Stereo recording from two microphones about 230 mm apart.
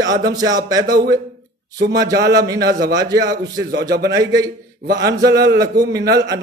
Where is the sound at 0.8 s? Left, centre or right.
Right.